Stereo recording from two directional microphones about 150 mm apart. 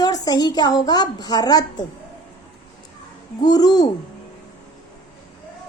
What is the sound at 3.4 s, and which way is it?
Speech, 25° left (ahead or behind).